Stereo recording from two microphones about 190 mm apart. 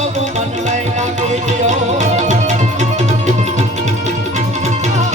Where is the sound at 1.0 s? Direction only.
40° right (ahead or behind).